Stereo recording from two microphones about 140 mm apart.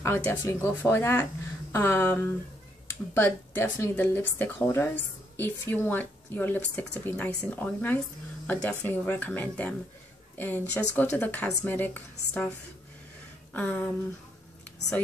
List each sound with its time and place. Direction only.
0.0 s speech: 15° left (ahead or behind)
13.5 s speech: 10° left (ahead or behind)